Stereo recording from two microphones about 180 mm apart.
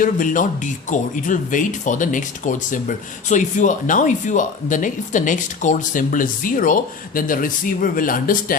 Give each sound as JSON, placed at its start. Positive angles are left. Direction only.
{"t": 0.0, "sound": "speech", "side_deg": 50}